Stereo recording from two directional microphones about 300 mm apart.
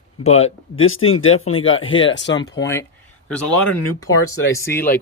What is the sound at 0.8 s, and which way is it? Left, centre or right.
Speech, left.